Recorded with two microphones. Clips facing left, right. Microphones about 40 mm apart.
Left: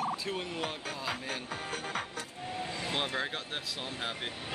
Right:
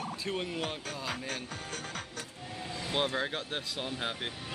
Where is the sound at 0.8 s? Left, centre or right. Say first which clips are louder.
Left 1 dB; centre.